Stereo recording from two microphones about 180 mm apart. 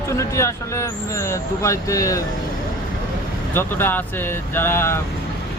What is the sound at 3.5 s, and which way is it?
Speech, 10° left (ahead or behind).